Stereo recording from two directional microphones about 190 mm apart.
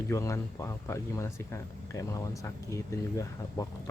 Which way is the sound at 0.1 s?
15° left (ahead or behind).